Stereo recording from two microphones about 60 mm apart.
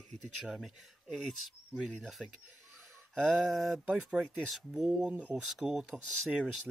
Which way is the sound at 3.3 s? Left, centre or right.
Centre.